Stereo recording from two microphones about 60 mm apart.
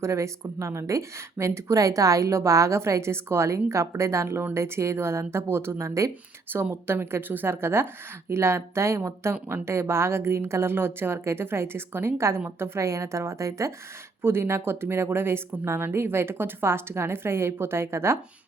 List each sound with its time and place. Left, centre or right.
0.0 s speech: right
6.5 s speech: right
12.8 s speech: right
14.2 s speech: right